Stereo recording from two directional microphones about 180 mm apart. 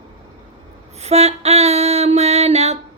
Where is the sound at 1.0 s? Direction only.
35° right (ahead or behind).